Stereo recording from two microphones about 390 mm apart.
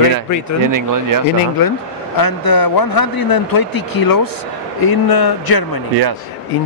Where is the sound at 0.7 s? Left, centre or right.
Right.